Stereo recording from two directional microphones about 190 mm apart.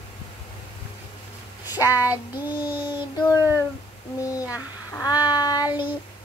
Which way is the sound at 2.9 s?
25° left (ahead or behind).